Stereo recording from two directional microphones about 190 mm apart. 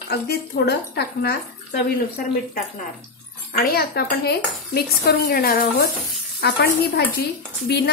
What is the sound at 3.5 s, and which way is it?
Speech, 55° left (ahead or behind).